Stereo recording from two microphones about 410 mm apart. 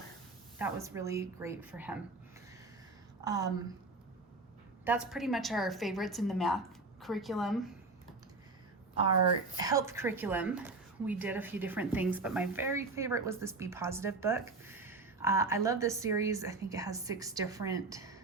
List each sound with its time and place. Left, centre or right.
0.6 s a woman's voice: centre
3.2 s a woman's voice: centre
4.9 s a woman's voice: centre
9.6 s a woman's voice: centre